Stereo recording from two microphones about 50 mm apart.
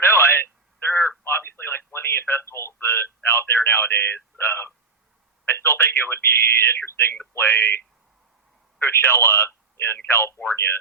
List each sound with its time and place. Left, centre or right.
0.0 s telephone: left
1.2 s radio: left
5.5 s speech: left
7.3 s speech: left
8.8 s speech: left